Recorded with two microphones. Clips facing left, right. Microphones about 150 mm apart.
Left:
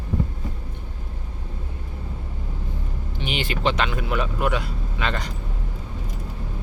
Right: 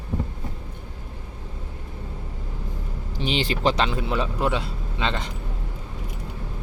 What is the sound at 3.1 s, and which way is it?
Speech, 30° right (ahead or behind).